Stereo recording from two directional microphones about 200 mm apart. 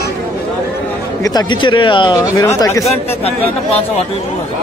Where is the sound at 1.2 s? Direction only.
20° left (ahead or behind).